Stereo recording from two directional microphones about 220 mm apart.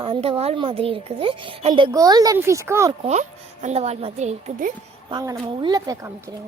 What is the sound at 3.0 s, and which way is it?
A woman's voice, 30° right (ahead or behind).